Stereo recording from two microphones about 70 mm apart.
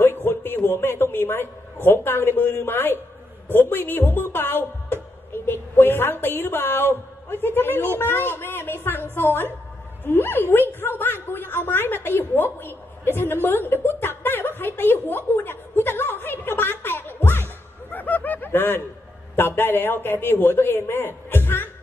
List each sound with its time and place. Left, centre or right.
0.0 s a sound: left
1.9 s a woman's voice: left
13.8 s chuckle: left
17.9 s snicker: left
19.3 s a woman's voice: left